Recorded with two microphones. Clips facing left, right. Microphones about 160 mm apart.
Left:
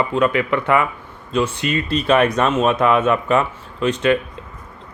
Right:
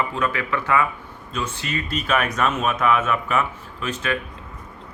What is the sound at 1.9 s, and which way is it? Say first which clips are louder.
Speech: left 7 dB; 35° left (ahead or behind).